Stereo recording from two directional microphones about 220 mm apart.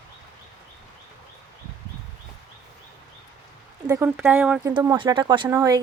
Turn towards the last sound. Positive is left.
turn(degrees=-15)  # may be behind; listen again after turning